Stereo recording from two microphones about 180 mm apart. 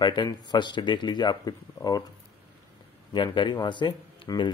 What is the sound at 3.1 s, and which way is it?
Speech, 25° left (ahead or behind).